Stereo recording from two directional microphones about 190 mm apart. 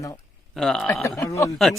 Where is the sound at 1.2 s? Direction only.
15° left (ahead or behind).